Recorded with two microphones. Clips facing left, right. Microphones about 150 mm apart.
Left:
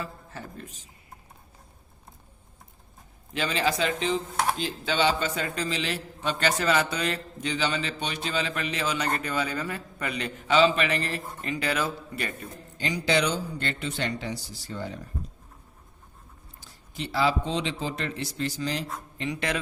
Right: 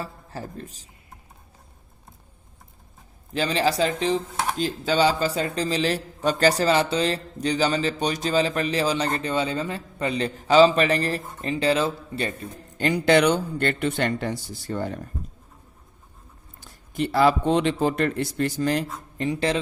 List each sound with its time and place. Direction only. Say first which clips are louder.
0.0 s a woman's voice: right 3 dB; 35° right (ahead or behind)
3.3 s a man's voice: right 4 dB; 35° right (ahead or behind)
12.7 s speech: right 7 dB; 55° right (ahead or behind)
16.6 s speech: right 10 dB; 55° right (ahead or behind)
19.3 s a man's voice: right 6 dB; 30° right (ahead or behind)